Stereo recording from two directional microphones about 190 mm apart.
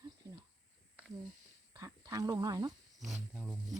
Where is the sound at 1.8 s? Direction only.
15° right (ahead or behind).